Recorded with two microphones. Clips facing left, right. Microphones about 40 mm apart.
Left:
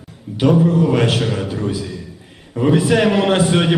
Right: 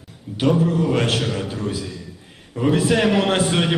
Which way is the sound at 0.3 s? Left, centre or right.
Centre.